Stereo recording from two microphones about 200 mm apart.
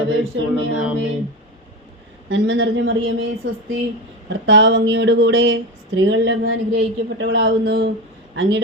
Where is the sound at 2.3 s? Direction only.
70° right (ahead or behind).